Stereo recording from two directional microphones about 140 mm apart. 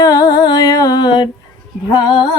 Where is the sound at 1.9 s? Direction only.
30° left (ahead or behind).